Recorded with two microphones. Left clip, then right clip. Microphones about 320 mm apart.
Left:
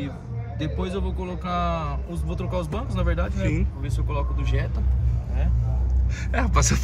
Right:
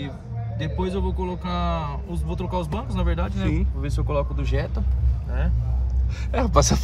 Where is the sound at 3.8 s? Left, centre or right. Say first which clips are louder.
Right 5 dB; centre.